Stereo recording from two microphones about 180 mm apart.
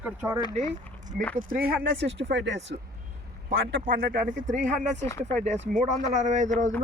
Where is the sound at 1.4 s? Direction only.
55° right (ahead or behind).